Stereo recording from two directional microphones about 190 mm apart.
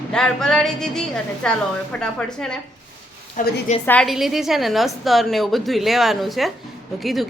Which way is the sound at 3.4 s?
45° left (ahead or behind).